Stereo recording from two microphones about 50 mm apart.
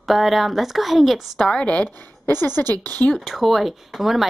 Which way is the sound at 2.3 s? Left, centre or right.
Left.